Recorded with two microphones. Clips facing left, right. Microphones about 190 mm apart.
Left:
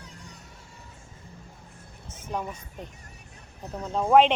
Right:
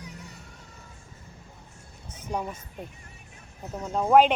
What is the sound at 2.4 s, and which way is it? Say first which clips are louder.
Speech: even; centre (ahead or behind).